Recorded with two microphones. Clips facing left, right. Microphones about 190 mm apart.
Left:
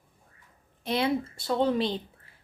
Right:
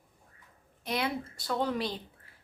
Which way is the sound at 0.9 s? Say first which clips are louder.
Left 6 dB; 25° left (ahead or behind).